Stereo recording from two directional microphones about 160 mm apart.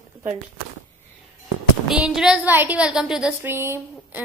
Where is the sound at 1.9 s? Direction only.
5° right (ahead or behind).